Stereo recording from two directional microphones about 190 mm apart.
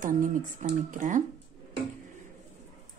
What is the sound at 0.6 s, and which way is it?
Speech, 40° right (ahead or behind).